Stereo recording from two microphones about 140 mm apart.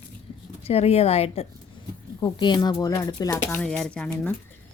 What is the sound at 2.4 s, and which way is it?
Speech, 30° left (ahead or behind).